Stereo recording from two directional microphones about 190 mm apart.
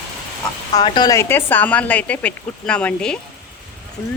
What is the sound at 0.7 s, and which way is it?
Speech, 20° left (ahead or behind).